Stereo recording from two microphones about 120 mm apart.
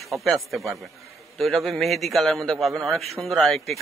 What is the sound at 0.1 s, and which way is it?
A man's voice, centre (ahead or behind).